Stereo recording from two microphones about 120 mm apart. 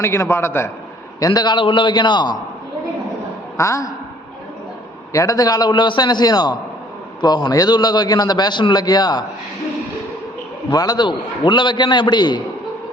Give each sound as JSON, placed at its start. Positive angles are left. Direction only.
{"t": 0.0, "sound": "a man's voice", "side_deg": 20}
{"t": 1.2, "sound": "a man's voice", "side_deg": 35}
{"t": 3.6, "sound": "a man's voice", "side_deg": 25}
{"t": 5.1, "sound": "a man's voice", "side_deg": 30}
{"t": 10.7, "sound": "a man's voice", "side_deg": 35}